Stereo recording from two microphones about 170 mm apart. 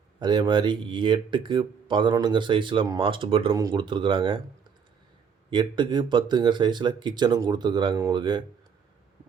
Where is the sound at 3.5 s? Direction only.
20° right (ahead or behind).